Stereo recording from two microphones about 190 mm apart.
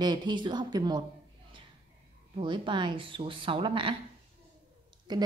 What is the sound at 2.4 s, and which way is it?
A woman's voice, 25° right (ahead or behind).